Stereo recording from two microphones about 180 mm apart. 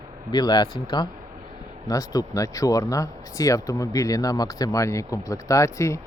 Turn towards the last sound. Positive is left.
turn(degrees=15)  # may be behind; listen again after turning